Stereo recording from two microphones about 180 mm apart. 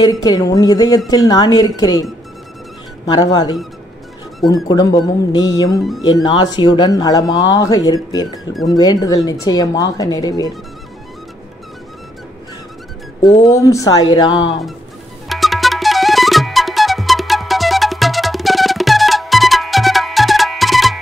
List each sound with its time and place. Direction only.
0.0 s speech: 20° left (ahead or behind)
3.1 s speech: 20° left (ahead or behind)
4.6 s speech: 20° left (ahead or behind)
13.2 s speech: 15° left (ahead or behind)
15.2 s music: centre (ahead or behind)